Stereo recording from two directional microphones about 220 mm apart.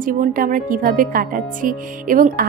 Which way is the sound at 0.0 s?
40° right (ahead or behind).